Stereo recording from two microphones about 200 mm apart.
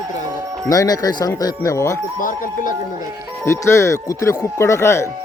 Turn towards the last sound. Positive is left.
turn(degrees=15)  # may be behind; listen again after turning